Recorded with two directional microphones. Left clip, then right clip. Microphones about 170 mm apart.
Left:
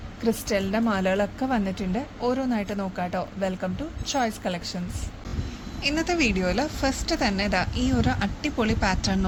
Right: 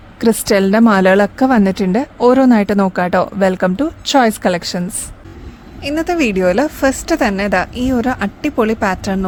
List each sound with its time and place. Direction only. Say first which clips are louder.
0.2 s a woman's voice: right 13 dB; 75° right (ahead or behind)
5.8 s speech: right 8 dB; 60° right (ahead or behind)